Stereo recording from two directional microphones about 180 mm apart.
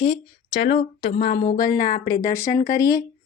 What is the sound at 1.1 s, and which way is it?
Speech, 55° left (ahead or behind).